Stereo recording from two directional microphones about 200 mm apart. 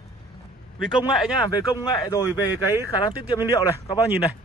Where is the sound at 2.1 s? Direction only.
15° left (ahead or behind).